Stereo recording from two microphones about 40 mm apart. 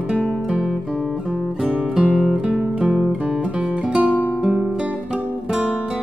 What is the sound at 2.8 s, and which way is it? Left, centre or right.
Guitar, right.